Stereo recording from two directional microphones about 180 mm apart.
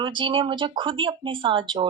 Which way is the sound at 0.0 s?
25° right (ahead or behind).